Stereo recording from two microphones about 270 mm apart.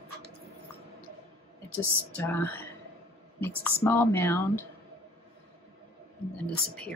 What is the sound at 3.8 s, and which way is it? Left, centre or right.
Speech, centre.